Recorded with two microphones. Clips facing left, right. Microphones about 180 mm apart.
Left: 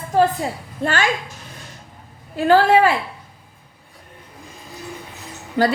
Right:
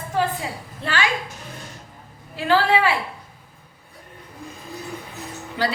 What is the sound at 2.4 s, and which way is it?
Speech, 45° left (ahead or behind).